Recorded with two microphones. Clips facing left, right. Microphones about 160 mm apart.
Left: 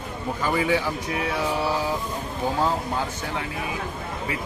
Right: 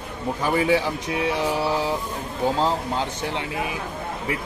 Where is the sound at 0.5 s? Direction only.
25° right (ahead or behind).